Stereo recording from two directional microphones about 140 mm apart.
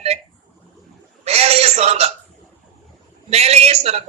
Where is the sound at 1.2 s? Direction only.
50° right (ahead or behind).